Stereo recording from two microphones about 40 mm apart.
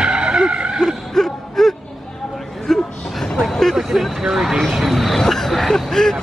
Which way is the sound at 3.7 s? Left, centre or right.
Centre.